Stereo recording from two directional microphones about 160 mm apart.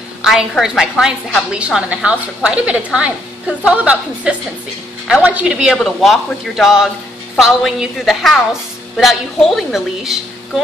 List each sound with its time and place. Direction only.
0.2 s a woman's voice: 5° right (ahead or behind)